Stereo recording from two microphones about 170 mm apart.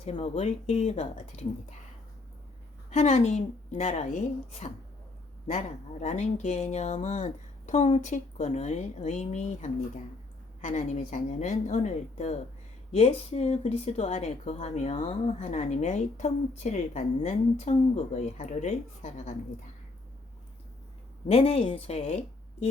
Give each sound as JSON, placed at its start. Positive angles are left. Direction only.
{"t": 0.0, "sound": "a woman's voice", "side_deg": 40}
{"t": 2.9, "sound": "a woman's voice", "side_deg": 40}
{"t": 5.5, "sound": "a woman's voice", "side_deg": 40}
{"t": 21.2, "sound": "a woman's voice", "side_deg": 35}